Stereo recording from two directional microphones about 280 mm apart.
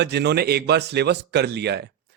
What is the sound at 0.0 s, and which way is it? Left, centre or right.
Speech, right.